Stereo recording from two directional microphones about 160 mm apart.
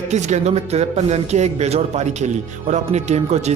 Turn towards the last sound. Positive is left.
turn(degrees=-45)  # may be behind; listen again after turning